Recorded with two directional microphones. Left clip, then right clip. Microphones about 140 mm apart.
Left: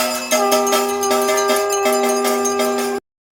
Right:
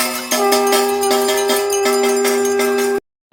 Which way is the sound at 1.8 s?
Centre (ahead or behind).